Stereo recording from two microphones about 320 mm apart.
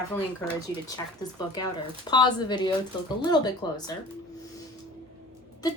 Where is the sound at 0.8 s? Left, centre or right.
Centre.